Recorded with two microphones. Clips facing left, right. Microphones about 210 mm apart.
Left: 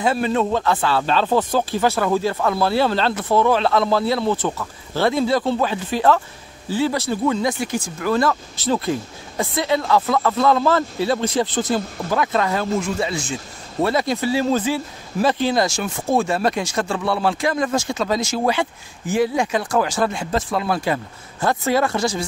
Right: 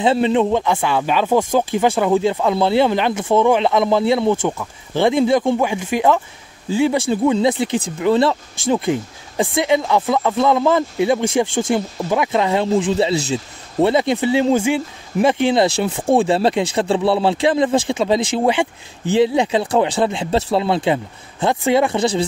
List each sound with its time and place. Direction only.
0.0 s speech: 25° right (ahead or behind)